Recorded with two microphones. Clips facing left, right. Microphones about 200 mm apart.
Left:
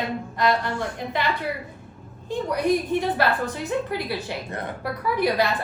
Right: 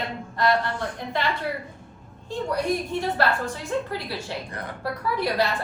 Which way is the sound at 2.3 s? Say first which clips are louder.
Left 3 dB; 20° left (ahead or behind).